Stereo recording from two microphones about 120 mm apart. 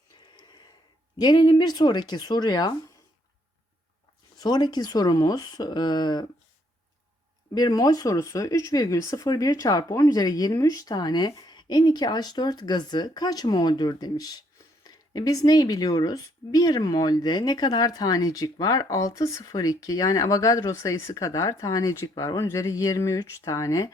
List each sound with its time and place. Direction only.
0.2 s gasp: 40° left (ahead or behind)
1.2 s speech: 35° left (ahead or behind)
4.4 s speech: 35° left (ahead or behind)
7.5 s speech: 35° left (ahead or behind)